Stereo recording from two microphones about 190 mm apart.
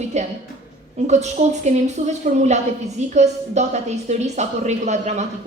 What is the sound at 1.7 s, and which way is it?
A woman's voice, 35° right (ahead or behind).